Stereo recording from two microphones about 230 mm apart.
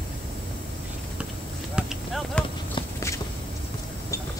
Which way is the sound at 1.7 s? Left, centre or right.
Centre.